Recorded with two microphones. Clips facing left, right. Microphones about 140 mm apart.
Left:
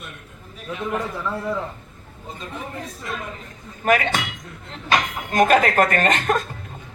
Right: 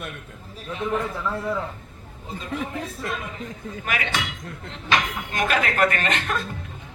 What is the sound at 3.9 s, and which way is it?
Speech, 45° left (ahead or behind).